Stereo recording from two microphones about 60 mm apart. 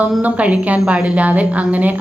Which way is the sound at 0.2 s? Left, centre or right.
Right.